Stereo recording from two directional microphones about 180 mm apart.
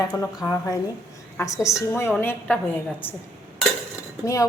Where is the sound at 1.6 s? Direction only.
15° left (ahead or behind).